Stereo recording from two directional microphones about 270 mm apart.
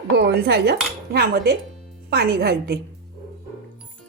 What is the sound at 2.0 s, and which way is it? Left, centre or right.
Speech, right.